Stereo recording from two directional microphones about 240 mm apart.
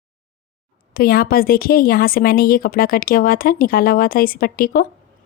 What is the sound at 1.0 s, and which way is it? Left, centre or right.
A woman's voice, left.